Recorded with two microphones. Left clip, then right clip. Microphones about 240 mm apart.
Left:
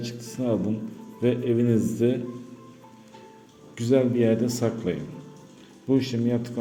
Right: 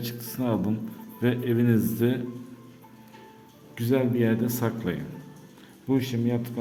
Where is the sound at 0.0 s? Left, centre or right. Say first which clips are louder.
Left 1 dB; centre.